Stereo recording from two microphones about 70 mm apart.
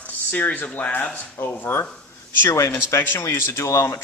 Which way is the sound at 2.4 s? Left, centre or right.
Left.